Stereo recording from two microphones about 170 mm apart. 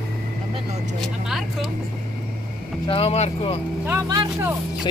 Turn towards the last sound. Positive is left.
turn(degrees=-15)  # may be behind; listen again after turning